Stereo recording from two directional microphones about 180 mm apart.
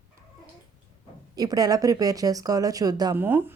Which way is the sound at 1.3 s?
20° right (ahead or behind).